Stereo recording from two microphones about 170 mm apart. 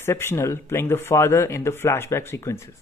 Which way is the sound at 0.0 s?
15° left (ahead or behind).